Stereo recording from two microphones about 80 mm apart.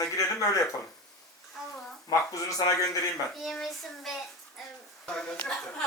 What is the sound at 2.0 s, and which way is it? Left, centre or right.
Speech, left.